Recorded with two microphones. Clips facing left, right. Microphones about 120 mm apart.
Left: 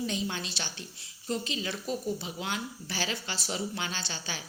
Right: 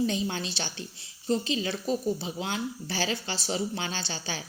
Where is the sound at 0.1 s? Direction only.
35° right (ahead or behind).